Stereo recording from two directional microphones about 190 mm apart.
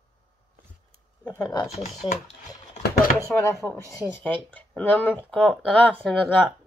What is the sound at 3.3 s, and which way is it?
Speech, 15° left (ahead or behind).